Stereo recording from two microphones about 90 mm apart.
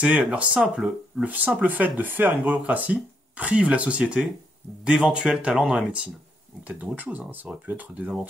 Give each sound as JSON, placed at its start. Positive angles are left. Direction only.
{"t": 0.0, "sound": "speech", "side_deg": -10}
{"t": 1.2, "sound": "speech", "side_deg": -15}